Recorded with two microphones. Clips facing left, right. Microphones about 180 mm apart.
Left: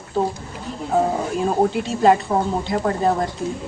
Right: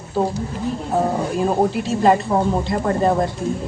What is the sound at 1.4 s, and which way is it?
A woman's voice, centre (ahead or behind).